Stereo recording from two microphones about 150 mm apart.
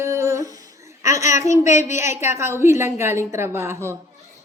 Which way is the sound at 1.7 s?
50° left (ahead or behind).